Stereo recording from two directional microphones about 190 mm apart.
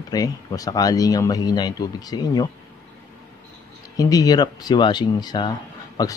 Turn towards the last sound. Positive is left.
turn(degrees=20)  # may be behind; listen again after turning